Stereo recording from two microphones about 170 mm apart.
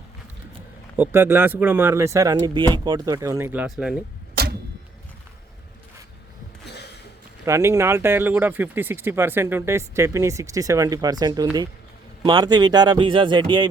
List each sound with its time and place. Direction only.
0.9 s speech: 10° right (ahead or behind)
7.4 s speech: 15° right (ahead or behind)